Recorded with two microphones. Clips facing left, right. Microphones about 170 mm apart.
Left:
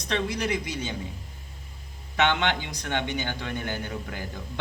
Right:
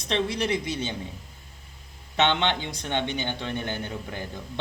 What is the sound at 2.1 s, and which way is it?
A man's voice, 20° right (ahead or behind).